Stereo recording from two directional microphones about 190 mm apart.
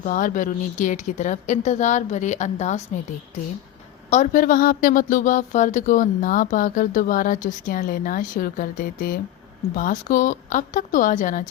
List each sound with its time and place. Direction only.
0.0 s a woman's voice: 45° left (ahead or behind)
4.1 s speech: 40° left (ahead or behind)